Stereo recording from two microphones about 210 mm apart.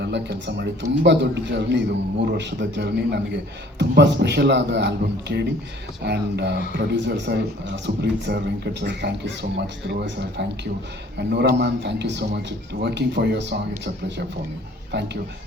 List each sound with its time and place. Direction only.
0.0 s a man's voice: 55° right (ahead or behind)